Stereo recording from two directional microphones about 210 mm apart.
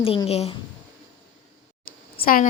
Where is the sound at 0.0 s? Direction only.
25° left (ahead or behind).